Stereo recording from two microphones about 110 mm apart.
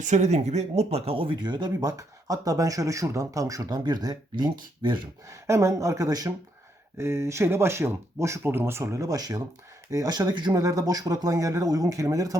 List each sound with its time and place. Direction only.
0.1 s speech: 90° right; by 5.0 s 45° right (ahead or behind)
5.3 s speech: 25° right (ahead or behind)
7.0 s speech: 25° right (ahead or behind)